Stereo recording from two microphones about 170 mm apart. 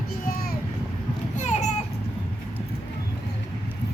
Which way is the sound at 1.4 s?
45° left (ahead or behind).